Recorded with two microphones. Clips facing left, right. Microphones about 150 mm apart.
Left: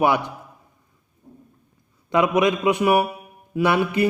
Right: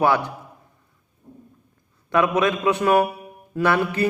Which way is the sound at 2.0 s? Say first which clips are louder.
Left 1 dB; 15° left (ahead or behind).